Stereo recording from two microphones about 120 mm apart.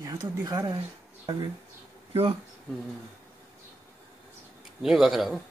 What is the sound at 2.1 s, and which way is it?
Speech, 50° right (ahead or behind).